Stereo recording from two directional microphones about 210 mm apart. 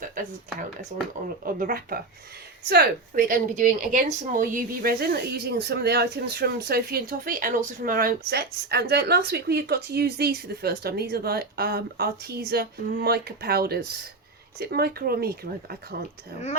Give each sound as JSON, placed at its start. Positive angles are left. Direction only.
{"t": 1.5, "sound": "a woman's voice", "side_deg": -40}